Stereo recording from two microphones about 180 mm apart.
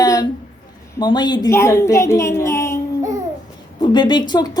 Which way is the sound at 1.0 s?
25° left (ahead or behind).